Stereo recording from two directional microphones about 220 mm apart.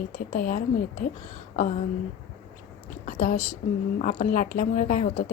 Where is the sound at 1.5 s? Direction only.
35° left (ahead or behind).